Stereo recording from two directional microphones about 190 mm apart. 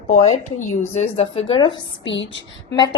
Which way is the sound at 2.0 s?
75° left (ahead or behind).